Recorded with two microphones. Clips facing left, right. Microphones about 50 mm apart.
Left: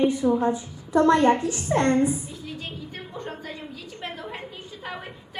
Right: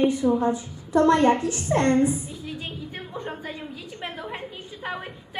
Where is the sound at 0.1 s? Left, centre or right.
Left.